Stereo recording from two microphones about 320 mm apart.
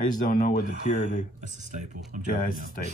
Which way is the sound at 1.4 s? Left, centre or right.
Right.